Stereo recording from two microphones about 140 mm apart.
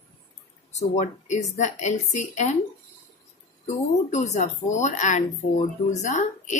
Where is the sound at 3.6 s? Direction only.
55° left (ahead or behind).